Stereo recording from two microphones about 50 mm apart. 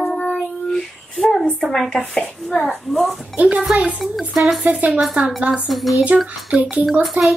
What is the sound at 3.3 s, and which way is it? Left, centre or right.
Speech, right.